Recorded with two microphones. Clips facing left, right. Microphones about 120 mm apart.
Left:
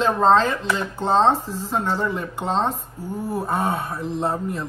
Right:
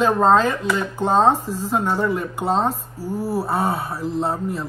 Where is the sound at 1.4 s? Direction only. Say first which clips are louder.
Right 3 dB; 40° right (ahead or behind).